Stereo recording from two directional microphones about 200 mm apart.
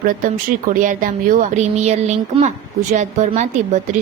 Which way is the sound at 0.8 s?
40° right (ahead or behind).